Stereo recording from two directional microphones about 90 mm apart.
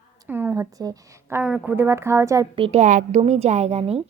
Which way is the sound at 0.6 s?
40° right (ahead or behind).